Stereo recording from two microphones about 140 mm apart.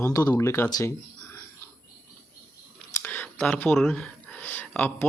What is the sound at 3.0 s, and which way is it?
Computer keyboard, 10° left (ahead or behind).